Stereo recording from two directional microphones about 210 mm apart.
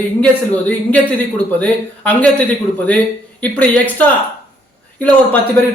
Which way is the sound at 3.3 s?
5° left (ahead or behind).